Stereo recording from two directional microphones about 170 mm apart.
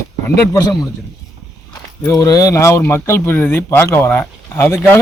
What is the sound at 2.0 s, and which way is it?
Speech, 20° left (ahead or behind).